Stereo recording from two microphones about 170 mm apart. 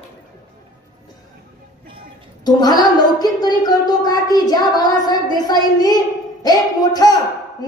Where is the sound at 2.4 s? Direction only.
25° left (ahead or behind).